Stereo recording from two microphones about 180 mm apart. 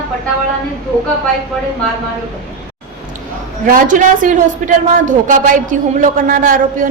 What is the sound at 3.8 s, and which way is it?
A man's voice, 45° right (ahead or behind).